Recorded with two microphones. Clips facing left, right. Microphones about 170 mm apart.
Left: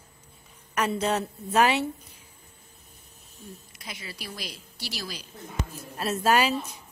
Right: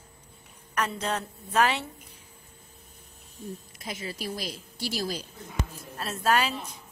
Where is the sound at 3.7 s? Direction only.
40° right (ahead or behind).